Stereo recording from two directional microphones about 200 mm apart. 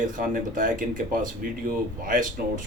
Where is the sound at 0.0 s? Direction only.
40° right (ahead or behind).